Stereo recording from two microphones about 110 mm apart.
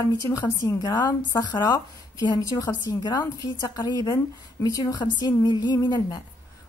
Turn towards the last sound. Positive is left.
turn(degrees=40)  # may be behind; listen again after turning